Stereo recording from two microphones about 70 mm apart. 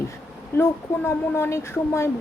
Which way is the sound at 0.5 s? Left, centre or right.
Left.